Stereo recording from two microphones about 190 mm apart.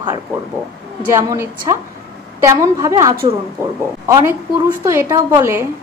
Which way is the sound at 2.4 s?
15° right (ahead or behind).